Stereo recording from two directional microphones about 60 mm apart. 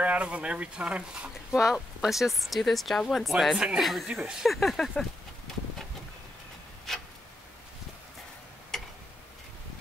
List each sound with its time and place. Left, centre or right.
0.0 s speech: right
1.5 s speech: centre
6.9 s tick-tock: centre